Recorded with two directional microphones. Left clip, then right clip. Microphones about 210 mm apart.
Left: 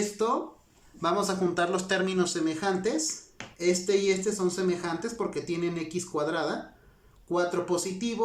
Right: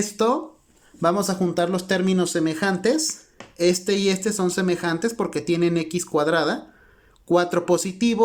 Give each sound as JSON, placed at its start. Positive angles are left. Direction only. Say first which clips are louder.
{"t": 1.0, "sound": "speech", "louder": "right 5 dB", "side_deg": -35}